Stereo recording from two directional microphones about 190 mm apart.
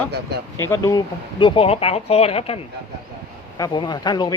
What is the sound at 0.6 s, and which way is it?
Speech, 15° left (ahead or behind).